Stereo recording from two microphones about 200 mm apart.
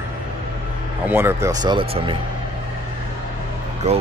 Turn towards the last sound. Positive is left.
turn(degrees=-30)  # may be behind; listen again after turning